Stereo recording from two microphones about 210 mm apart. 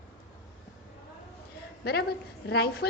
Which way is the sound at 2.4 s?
50° left (ahead or behind).